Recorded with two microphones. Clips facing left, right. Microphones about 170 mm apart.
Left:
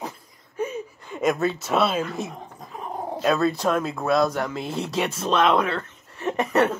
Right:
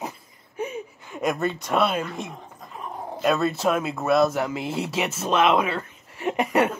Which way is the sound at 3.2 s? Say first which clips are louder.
Even; centre (ahead or behind).